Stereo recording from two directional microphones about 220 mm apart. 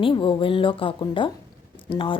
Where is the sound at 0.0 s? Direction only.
25° left (ahead or behind).